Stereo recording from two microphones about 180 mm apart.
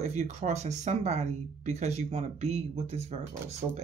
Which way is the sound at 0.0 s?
40° right (ahead or behind).